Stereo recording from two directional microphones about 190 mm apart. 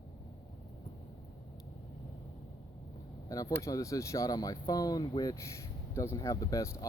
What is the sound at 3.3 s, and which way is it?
Speech, 20° left (ahead or behind).